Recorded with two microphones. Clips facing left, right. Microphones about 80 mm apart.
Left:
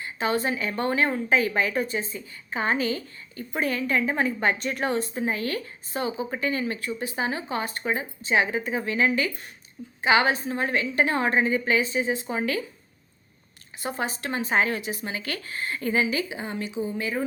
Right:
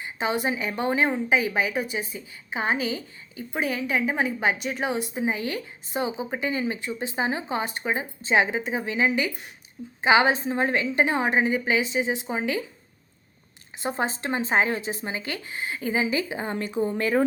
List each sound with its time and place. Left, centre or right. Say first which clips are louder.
0.0 s a woman's voice: even; centre
13.8 s a woman's voice: right 2 dB; right; by 16.0 s centre
16.0 s speech: right 1 dB; right